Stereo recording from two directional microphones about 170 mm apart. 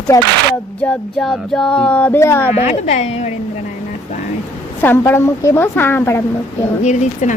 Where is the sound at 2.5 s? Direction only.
40° left (ahead or behind).